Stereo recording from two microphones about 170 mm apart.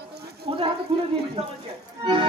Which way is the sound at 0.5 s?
30° right (ahead or behind).